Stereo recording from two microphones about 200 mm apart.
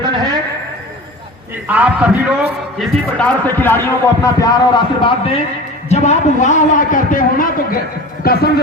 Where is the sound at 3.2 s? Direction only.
10° left (ahead or behind).